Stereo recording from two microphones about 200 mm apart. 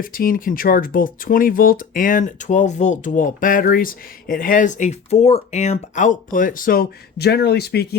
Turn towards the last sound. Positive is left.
turn(degrees=55)  # may be behind; listen again after turning